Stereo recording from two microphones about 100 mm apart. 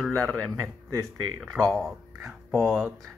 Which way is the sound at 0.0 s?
5° left (ahead or behind).